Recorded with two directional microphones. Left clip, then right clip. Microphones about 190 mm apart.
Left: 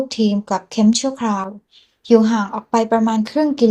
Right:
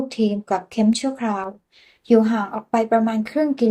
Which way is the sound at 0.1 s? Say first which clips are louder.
Left 2 dB; 25° left (ahead or behind).